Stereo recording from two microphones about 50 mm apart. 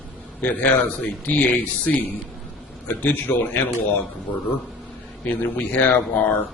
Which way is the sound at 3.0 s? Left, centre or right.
Left.